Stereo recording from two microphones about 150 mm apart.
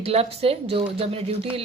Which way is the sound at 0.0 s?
40° right (ahead or behind).